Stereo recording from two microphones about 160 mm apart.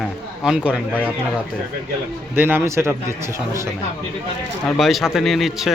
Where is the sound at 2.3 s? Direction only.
10° right (ahead or behind).